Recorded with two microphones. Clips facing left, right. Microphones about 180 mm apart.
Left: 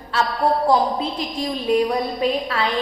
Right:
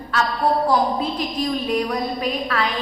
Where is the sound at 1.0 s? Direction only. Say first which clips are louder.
Right 1 dB; 25° left (ahead or behind).